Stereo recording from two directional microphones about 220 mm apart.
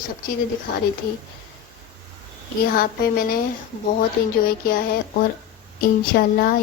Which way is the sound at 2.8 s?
40° left (ahead or behind).